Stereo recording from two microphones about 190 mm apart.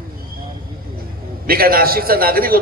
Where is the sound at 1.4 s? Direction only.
50° right (ahead or behind).